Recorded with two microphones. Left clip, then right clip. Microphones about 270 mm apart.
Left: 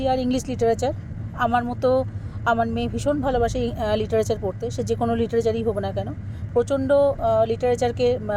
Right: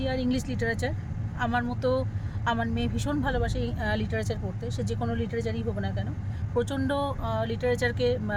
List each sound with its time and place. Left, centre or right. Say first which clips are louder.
0.0 s speech: left 7 dB; left
6.6 s speech: left 10 dB; centre